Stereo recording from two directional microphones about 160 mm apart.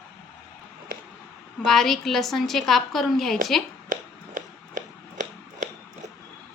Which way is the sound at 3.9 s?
55° right (ahead or behind).